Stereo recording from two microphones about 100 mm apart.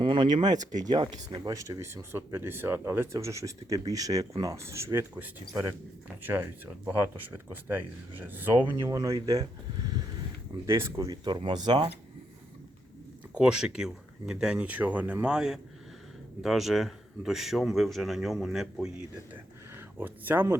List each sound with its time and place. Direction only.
0.0 s speech: 50° right (ahead or behind)
0.4 s speech: 40° right (ahead or behind); by 8.7 s 20° right (ahead or behind)
8.7 s speech: 30° right (ahead or behind)
10.7 s speech: 25° right (ahead or behind)
11.1 s speech: 50° right (ahead or behind)
13.3 s a man's voice: 10° right (ahead or behind)
20.0 s speech: 20° right (ahead or behind)